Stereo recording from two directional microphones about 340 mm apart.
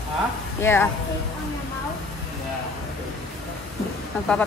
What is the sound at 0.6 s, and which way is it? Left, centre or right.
Speech, centre.